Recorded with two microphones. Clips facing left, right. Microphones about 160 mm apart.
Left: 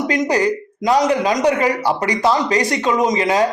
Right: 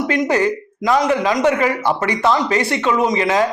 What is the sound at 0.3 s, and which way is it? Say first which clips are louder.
Speech: even; 35° left (ahead or behind).